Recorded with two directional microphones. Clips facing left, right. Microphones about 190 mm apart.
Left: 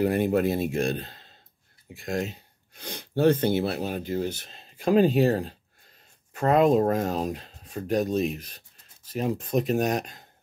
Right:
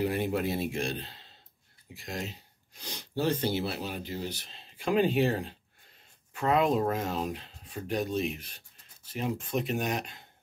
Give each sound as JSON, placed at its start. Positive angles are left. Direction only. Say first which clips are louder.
{"t": 0.0, "sound": "speech", "louder": "left 6 dB", "side_deg": 50}